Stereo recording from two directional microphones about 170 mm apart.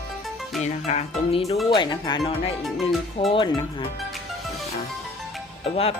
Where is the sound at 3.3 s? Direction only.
30° left (ahead or behind).